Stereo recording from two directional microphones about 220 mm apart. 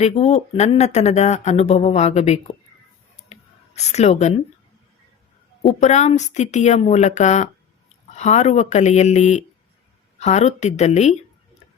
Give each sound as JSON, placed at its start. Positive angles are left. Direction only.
{"t": 0.0, "sound": "speech", "side_deg": 30}
{"t": 3.3, "sound": "a sound", "side_deg": 30}
{"t": 3.8, "sound": "speech", "side_deg": 30}
{"t": 5.6, "sound": "speech", "side_deg": 30}